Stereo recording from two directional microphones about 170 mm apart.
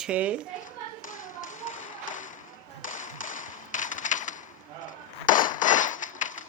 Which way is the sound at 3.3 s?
50° left (ahead or behind).